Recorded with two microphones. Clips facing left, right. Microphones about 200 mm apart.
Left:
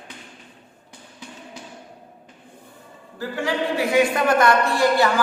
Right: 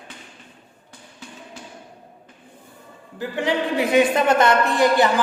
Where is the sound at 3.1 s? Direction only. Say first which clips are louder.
Right 2 dB; 20° right (ahead or behind).